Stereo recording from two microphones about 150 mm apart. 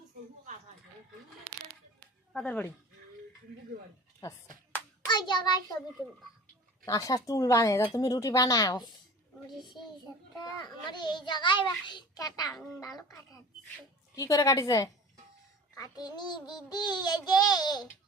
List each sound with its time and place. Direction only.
2.3 s speech: 5° left (ahead or behind)
4.2 s child singing: 20° left (ahead or behind)
5.0 s hands: 30° left (ahead or behind)
6.8 s child singing: 20° left (ahead or behind)
9.6 s a child's voice: 30° left (ahead or behind)
10.4 s child singing: 30° left (ahead or behind)